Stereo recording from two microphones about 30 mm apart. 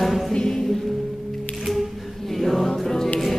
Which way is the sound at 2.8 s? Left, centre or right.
Centre.